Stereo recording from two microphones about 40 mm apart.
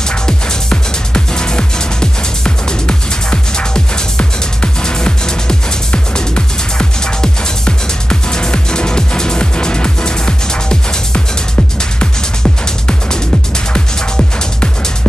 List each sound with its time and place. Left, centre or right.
0.1 s music: left
12.0 s music: left